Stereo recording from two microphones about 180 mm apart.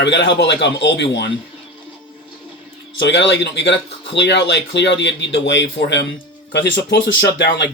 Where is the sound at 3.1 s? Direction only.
75° left (ahead or behind).